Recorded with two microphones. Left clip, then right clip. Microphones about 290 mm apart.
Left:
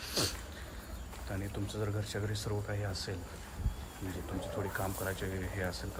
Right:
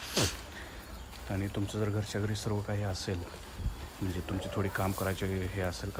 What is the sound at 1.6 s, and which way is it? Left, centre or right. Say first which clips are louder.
Speech: right 3 dB; right.